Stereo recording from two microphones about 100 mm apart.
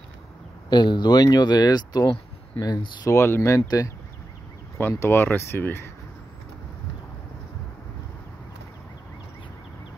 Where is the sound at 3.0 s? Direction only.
25° left (ahead or behind).